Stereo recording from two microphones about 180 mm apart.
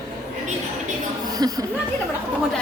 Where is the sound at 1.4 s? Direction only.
20° right (ahead or behind).